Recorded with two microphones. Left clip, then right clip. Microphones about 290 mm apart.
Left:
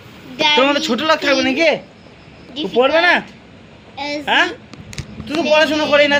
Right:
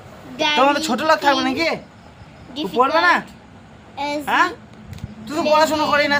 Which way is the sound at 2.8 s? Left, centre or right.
Right.